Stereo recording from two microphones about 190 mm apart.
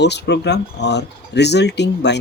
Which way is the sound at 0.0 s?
65° left (ahead or behind).